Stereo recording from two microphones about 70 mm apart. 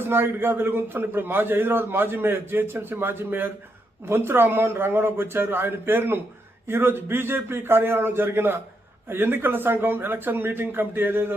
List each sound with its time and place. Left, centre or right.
0.0 s a man's voice: right